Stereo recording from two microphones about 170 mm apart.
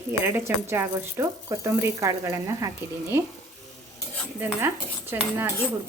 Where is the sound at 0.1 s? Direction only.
15° right (ahead or behind).